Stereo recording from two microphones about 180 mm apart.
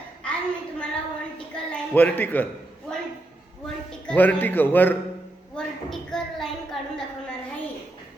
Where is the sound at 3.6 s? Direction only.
5° left (ahead or behind).